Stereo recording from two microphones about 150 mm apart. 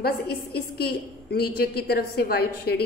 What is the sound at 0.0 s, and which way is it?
A woman's voice, 90° left.